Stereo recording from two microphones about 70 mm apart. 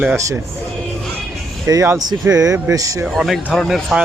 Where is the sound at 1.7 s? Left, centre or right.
Right.